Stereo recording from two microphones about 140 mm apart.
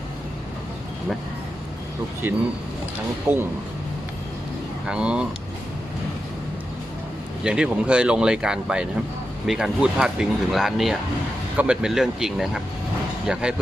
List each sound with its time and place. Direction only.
2.2 s speech: 15° right (ahead or behind)
4.9 s speech: 5° right (ahead or behind)
7.4 s speech: 5° right (ahead or behind)